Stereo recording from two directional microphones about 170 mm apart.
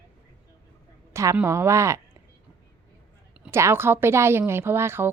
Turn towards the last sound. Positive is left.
turn(degrees=-15)  # may be behind; listen again after turning